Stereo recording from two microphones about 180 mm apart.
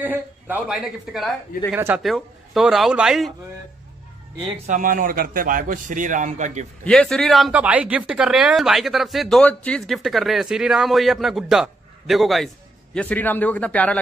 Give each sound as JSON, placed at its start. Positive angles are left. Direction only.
{"t": 0.0, "sound": "speech", "side_deg": -10}
{"t": 1.7, "sound": "speech", "side_deg": -10}
{"t": 2.0, "sound": "speech", "side_deg": 0}
{"t": 4.6, "sound": "a man's voice", "side_deg": -50}
{"t": 6.8, "sound": "a man's voice", "side_deg": 5}